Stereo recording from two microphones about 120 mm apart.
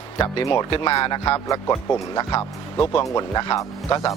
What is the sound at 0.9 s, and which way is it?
Speech, 35° left (ahead or behind).